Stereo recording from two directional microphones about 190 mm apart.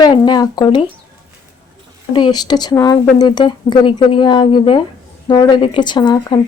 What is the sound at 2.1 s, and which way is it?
A woman's voice, 25° left (ahead or behind).